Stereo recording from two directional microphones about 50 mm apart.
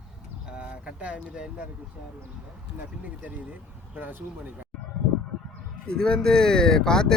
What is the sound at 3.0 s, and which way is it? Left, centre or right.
Speech, right.